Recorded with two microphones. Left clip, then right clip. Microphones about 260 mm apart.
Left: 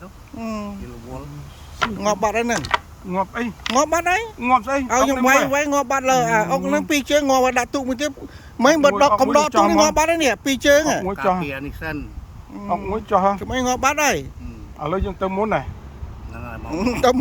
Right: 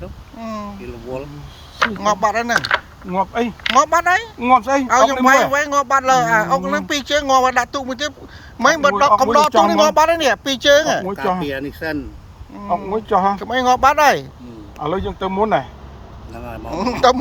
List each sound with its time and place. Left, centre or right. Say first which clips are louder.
0.3 s speech: right 1 dB; centre
2.0 s speech: right 1 dB; centre